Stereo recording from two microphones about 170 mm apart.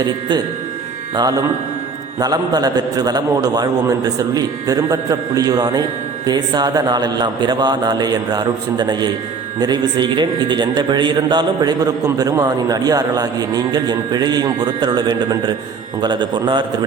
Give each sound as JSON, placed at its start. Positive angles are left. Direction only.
{"t": 0.0, "sound": "a man's voice", "side_deg": -25}